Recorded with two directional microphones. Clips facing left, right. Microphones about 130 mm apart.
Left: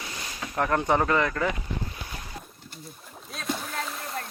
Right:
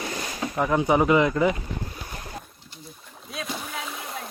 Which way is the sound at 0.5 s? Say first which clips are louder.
Right 2 dB; 5° right (ahead or behind).